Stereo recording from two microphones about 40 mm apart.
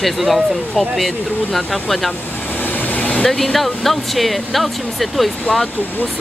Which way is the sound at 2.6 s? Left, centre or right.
Left.